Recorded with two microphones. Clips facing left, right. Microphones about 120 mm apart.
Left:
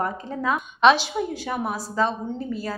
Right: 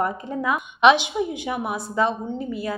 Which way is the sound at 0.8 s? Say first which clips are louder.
Right 1 dB; 20° right (ahead or behind).